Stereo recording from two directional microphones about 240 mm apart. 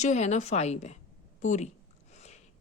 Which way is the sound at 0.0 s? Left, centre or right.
Left.